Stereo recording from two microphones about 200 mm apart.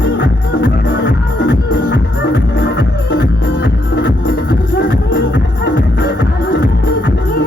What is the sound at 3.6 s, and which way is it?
Music, 50° left (ahead or behind).